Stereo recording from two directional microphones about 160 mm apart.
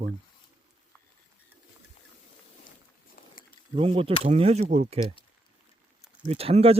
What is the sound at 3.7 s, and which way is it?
Speech, 35° right (ahead or behind).